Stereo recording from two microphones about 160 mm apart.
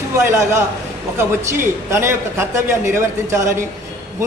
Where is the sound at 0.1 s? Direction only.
15° right (ahead or behind).